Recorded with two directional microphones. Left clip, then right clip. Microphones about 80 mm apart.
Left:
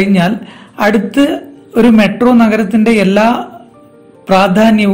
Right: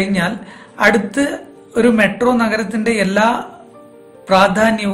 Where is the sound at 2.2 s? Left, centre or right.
Left.